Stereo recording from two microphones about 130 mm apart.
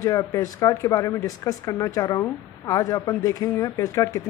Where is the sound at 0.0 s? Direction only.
25° left (ahead or behind).